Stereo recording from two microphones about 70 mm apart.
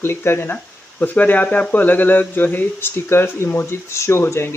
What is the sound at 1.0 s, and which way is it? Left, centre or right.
Speech, left.